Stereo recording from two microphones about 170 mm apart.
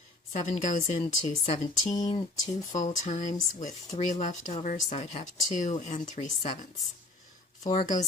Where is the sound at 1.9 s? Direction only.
25° left (ahead or behind).